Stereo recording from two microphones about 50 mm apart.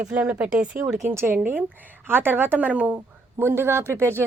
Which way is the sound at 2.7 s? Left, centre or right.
Right.